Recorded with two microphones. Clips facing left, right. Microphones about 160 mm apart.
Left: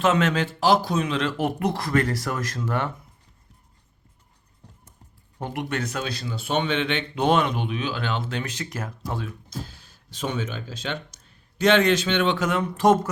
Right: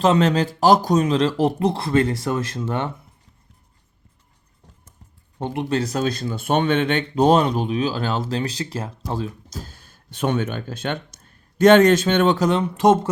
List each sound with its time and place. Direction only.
0.0 s speech: 35° right (ahead or behind)
5.4 s speech: 25° right (ahead or behind); by 12.5 s 45° right (ahead or behind)
12.5 s speech: 25° right (ahead or behind)